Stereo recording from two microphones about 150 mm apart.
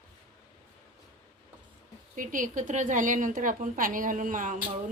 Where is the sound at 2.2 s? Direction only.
60° right (ahead or behind).